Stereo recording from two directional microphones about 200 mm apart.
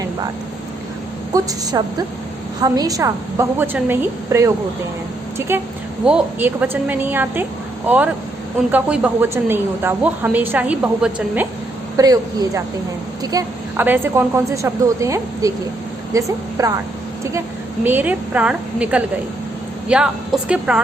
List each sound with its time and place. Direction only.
1.7 s a woman's voice: 20° right (ahead or behind)
11.9 s a woman's voice: 20° right (ahead or behind)
17.8 s a woman's voice: 10° right (ahead or behind)